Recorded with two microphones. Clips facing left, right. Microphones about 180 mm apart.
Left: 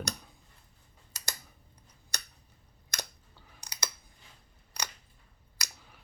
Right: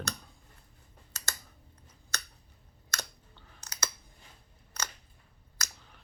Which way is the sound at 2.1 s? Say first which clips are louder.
Right 4 dB; 15° left (ahead or behind).